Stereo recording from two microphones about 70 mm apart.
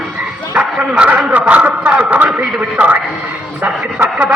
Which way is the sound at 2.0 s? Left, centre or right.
Centre.